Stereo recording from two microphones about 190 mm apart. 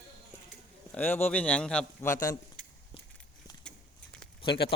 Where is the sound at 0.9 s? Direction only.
10° left (ahead or behind).